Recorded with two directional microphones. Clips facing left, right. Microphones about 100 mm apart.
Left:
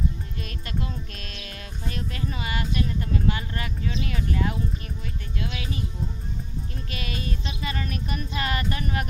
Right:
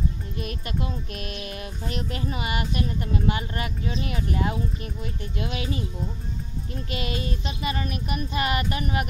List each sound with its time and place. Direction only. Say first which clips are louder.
0.4 s speech: right 3 dB; 20° right (ahead or behind)
6.9 s speech: right 4 dB; 25° right (ahead or behind)